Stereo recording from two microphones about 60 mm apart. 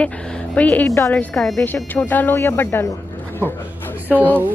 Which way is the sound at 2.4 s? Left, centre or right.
Left.